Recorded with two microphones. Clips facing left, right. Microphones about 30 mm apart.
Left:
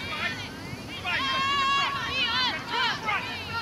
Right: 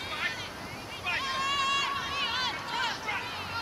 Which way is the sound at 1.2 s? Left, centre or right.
Left.